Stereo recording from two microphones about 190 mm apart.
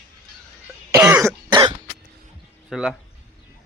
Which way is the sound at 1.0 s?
10° right (ahead or behind).